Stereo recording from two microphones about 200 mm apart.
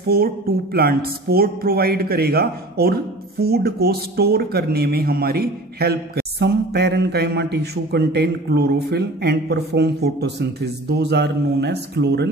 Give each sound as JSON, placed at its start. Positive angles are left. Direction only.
{"t": 0.7, "sound": "speech", "side_deg": -50}